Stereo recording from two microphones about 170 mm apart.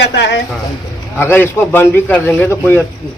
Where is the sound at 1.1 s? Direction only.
15° left (ahead or behind).